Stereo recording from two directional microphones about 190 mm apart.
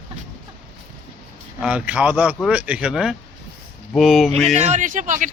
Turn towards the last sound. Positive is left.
turn(degrees=-45)  # may be behind; listen again after turning